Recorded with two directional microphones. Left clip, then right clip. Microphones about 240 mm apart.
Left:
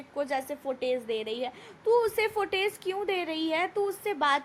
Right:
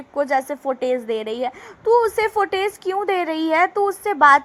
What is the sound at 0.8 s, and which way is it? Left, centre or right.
Speech, right.